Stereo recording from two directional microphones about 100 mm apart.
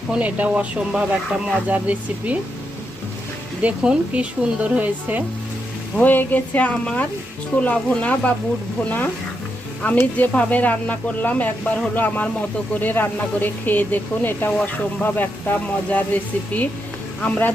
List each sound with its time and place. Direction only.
0.1 s speech: 15° right (ahead or behind)
3.6 s speech: 15° right (ahead or behind)
6.0 s speech: 20° left (ahead or behind)
17.2 s speech: 15° left (ahead or behind)